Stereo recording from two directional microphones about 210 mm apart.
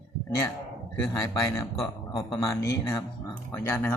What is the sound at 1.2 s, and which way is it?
Speech, 15° left (ahead or behind).